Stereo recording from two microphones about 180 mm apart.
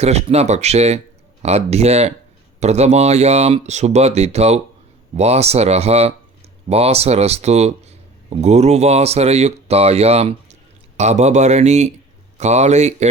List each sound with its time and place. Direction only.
0.0 s speech: 35° right (ahead or behind)